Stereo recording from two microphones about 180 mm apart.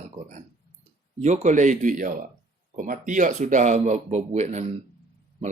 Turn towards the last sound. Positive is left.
turn(degrees=-40)  # may be behind; listen again after turning